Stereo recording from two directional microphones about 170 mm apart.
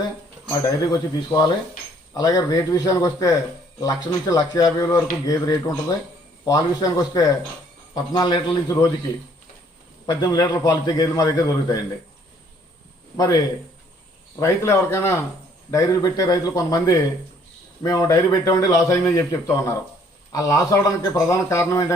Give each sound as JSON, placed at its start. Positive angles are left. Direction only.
{"t": 0.6, "sound": "a man's voice", "side_deg": 20}
{"t": 10.1, "sound": "a man's voice", "side_deg": 25}
{"t": 13.1, "sound": "a man's voice", "side_deg": 20}